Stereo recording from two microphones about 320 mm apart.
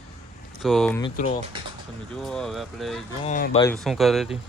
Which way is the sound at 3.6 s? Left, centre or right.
Centre.